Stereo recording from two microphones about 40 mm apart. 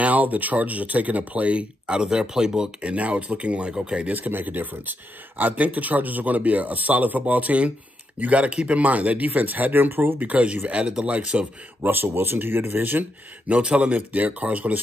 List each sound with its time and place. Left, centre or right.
0.0 s speech: right
1.9 s speech: centre
2.9 s speech: right
4.1 s speech: right
10.2 s speech: right
11.8 s speech: right
13.5 s speech: right
13.8 s speech: right